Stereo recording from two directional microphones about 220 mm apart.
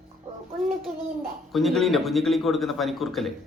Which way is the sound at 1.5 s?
Centre (ahead or behind).